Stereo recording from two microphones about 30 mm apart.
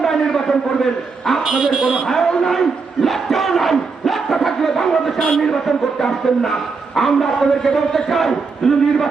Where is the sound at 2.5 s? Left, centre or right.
Centre.